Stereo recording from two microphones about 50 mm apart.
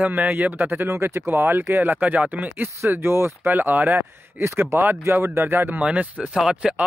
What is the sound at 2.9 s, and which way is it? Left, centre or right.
Speech, right.